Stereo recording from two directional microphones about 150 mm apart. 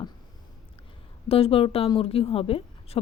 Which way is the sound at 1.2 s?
40° left (ahead or behind).